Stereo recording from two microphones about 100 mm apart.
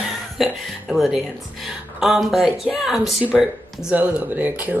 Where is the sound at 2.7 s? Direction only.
5° right (ahead or behind).